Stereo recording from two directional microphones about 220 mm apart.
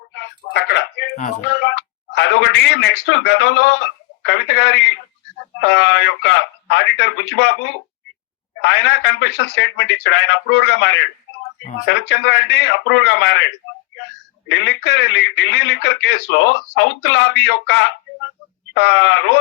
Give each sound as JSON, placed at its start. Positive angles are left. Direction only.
{"t": 0.1, "sound": "speech", "side_deg": 55}
{"t": 14.5, "sound": "speech", "side_deg": 50}